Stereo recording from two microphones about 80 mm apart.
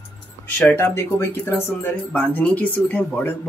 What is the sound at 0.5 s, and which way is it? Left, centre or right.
Speech, left.